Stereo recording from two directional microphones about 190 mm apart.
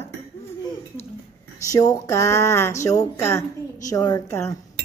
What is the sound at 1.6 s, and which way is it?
A woman's voice, 20° left (ahead or behind).